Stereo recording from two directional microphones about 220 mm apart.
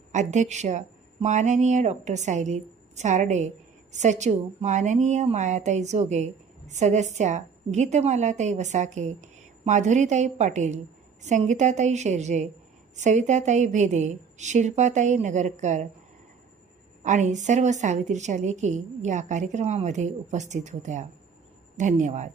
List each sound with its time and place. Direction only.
0.1 s a woman's voice: 35° right (ahead or behind)
17.0 s a woman's voice: 35° right (ahead or behind)